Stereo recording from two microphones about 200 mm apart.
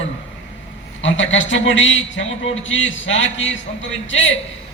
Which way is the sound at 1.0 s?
70° left (ahead or behind).